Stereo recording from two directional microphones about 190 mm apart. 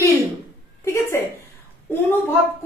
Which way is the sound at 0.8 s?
15° left (ahead or behind).